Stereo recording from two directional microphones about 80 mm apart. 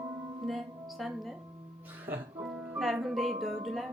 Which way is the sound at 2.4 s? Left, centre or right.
Centre.